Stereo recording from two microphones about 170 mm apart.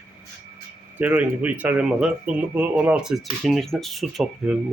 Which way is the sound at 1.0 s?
10° right (ahead or behind).